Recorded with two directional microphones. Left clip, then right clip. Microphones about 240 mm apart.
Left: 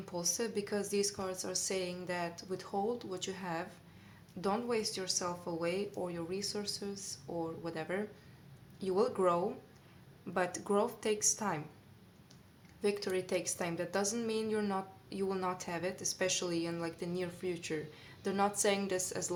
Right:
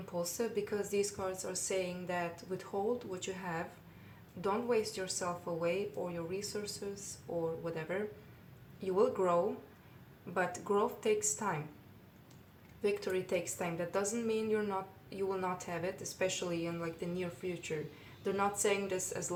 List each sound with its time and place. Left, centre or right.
0.2 s a woman's voice: left
12.8 s a woman's voice: left